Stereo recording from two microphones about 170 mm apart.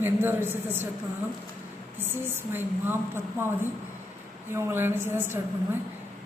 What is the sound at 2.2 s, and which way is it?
A woman's voice, 15° right (ahead or behind).